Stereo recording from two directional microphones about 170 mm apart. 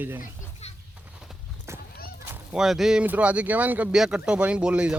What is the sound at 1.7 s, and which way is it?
Horse, 15° right (ahead or behind).